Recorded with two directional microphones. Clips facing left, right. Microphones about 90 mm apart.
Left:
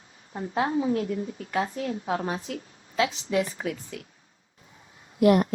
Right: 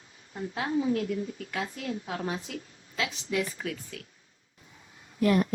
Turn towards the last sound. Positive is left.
turn(degrees=25)  # may be behind; listen again after turning